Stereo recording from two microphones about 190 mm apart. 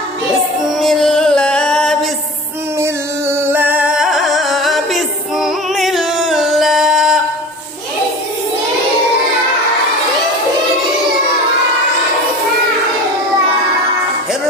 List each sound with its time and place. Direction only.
0.7 s music: centre (ahead or behind)
2.8 s music: 15° right (ahead or behind)